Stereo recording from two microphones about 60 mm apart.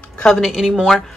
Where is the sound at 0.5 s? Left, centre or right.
Centre.